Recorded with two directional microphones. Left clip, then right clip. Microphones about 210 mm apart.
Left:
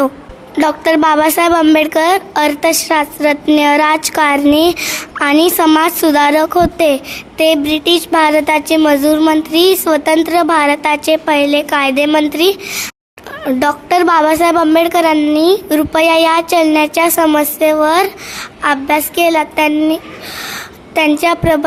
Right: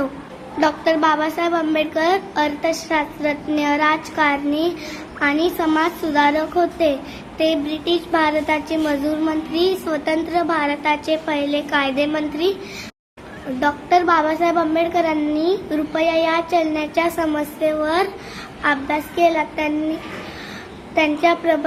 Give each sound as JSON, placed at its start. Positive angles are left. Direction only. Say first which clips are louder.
{"t": 0.6, "sound": "a woman's voice", "louder": "left 6 dB", "side_deg": 50}
{"t": 13.6, "sound": "a woman's voice", "louder": "left 4 dB", "side_deg": 55}
{"t": 20.9, "sound": "speech", "louder": "left 5 dB", "side_deg": 55}